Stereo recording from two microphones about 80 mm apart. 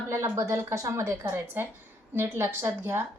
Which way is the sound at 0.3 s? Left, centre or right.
Right.